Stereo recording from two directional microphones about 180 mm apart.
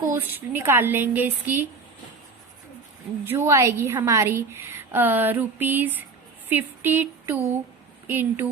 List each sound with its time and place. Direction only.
0.1 s a woman's voice: 10° right (ahead or behind)
3.2 s a woman's voice: 15° right (ahead or behind)
6.5 s a sound: 10° right (ahead or behind)
8.0 s speech: 10° right (ahead or behind)